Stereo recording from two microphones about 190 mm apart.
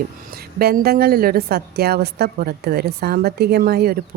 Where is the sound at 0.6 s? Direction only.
55° right (ahead or behind).